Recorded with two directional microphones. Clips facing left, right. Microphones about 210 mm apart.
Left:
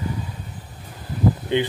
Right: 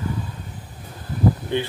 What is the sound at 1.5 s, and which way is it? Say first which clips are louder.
Speech: left 3 dB; 15° left (ahead or behind).